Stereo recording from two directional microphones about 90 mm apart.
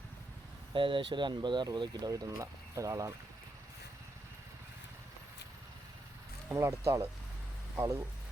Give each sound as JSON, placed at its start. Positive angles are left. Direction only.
{"t": 0.7, "sound": "speech", "side_deg": -65}
{"t": 6.5, "sound": "speech", "side_deg": -30}